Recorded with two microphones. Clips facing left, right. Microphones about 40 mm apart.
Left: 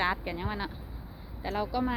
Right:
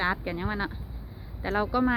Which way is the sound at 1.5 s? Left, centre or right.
Right.